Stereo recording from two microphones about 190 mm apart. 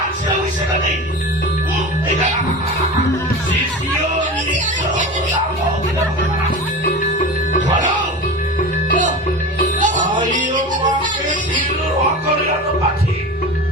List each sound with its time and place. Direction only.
4.0 s music: 40° right (ahead or behind)
9.8 s music: 40° right (ahead or behind)